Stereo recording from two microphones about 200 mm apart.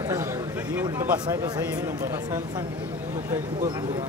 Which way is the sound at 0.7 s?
10° right (ahead or behind).